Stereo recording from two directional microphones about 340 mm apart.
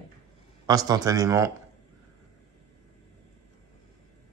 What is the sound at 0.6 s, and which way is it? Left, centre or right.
Speech, centre.